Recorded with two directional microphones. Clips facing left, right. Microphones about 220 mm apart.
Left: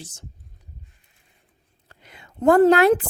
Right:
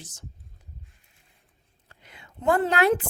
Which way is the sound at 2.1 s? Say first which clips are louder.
Left 8 dB; 40° left (ahead or behind).